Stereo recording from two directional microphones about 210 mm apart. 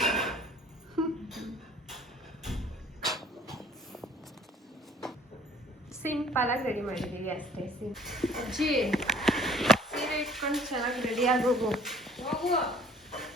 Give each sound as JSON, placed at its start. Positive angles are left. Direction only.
{"t": 0.0, "sound": "a sound", "side_deg": 0}
{"t": 6.0, "sound": "a woman's voice", "side_deg": 5}
{"t": 6.6, "sound": "a woman's voice", "side_deg": -35}
{"t": 6.8, "sound": "speech", "side_deg": 0}